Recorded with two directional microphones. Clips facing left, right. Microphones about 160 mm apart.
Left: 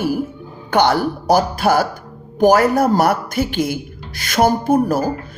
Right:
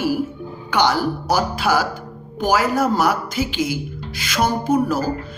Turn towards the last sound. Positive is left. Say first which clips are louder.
# left 3 dB
turn(degrees=50)  # may be behind; listen again after turning